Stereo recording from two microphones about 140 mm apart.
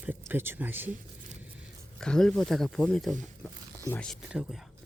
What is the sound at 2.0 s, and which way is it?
Speech, 5° left (ahead or behind).